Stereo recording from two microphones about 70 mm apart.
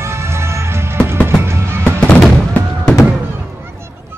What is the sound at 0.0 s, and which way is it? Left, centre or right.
Music, right.